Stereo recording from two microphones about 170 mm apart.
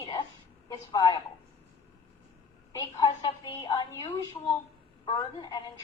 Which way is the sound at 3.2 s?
25° left (ahead or behind).